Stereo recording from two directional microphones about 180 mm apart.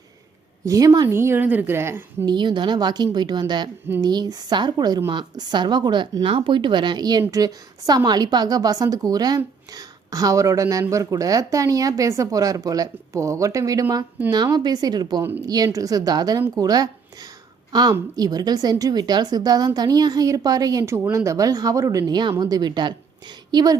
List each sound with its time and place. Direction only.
0.6 s a woman's voice: 15° right (ahead or behind)